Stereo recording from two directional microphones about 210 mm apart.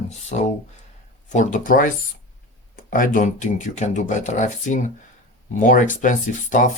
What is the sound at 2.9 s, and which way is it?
Speech, 40° left (ahead or behind).